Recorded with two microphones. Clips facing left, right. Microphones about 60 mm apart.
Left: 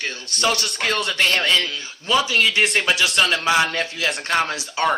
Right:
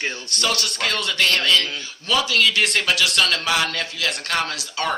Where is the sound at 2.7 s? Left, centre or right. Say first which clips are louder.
Left 1 dB; centre.